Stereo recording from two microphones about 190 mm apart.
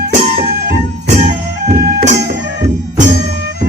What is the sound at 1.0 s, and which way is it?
Music, 35° right (ahead or behind).